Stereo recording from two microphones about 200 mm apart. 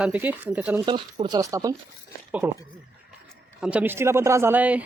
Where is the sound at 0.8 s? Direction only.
25° right (ahead or behind).